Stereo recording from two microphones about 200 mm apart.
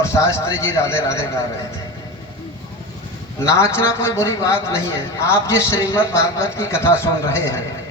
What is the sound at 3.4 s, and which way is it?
A man's voice, 15° left (ahead or behind).